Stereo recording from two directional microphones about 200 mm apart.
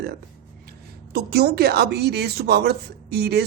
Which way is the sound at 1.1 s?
55° right (ahead or behind).